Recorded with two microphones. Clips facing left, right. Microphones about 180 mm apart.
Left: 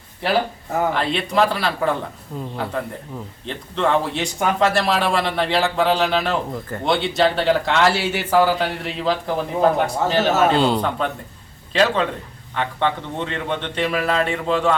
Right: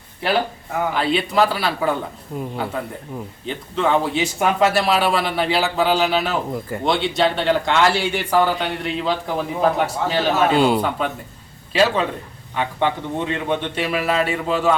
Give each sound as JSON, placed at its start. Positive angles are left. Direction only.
{"t": 0.2, "sound": "a man's voice", "side_deg": 0}